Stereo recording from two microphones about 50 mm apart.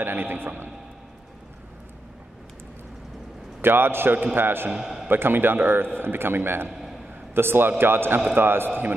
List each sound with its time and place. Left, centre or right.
0.0 s a man's voice: right
3.6 s a man's voice: right
4.7 s a man's voice: centre
5.0 s a man's voice: right
6.7 s a sound: centre
7.3 s a man's voice: right